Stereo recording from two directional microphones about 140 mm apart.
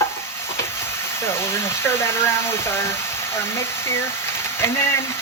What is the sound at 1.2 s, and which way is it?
Speech, 20° left (ahead or behind).